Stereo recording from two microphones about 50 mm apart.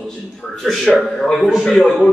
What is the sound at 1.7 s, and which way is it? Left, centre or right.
Speech, centre.